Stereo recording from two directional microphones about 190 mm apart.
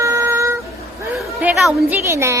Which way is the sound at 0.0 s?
15° right (ahead or behind).